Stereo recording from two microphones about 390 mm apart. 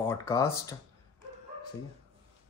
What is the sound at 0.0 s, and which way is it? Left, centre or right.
Speech, centre.